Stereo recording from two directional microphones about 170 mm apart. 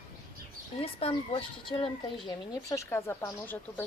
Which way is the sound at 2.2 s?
20° left (ahead or behind).